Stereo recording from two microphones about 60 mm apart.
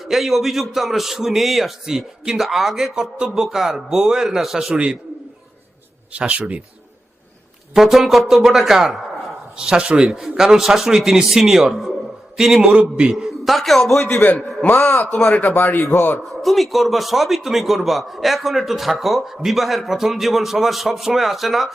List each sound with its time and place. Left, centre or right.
0.0 s a man's voice: centre
6.1 s speech: right
7.7 s a man's voice: centre
9.6 s a man's voice: centre
12.6 s a man's voice: centre
14.7 s speech: left
16.4 s a man's voice: centre